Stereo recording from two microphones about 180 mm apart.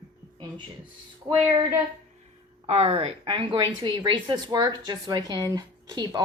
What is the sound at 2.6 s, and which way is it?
Speech, 35° right (ahead or behind).